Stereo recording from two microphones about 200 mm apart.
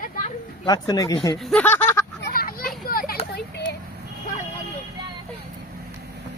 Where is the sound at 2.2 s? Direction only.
45° left (ahead or behind).